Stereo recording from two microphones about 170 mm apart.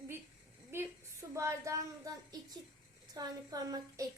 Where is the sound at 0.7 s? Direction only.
15° right (ahead or behind).